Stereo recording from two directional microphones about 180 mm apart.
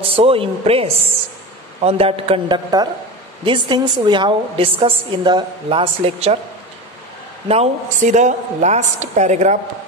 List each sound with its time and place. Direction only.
0.0 s a woman's voice: 30° right (ahead or behind)
7.4 s a woman's voice: 40° right (ahead or behind)